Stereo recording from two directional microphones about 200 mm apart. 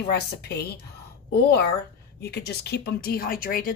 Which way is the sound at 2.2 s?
55° left (ahead or behind).